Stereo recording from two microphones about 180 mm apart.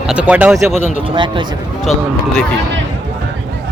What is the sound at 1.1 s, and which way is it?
Speech, 25° right (ahead or behind).